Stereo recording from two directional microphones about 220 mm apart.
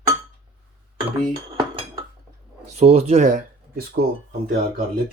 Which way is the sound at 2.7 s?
25° right (ahead or behind).